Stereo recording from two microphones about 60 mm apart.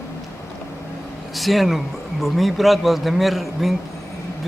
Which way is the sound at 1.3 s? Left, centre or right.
Centre.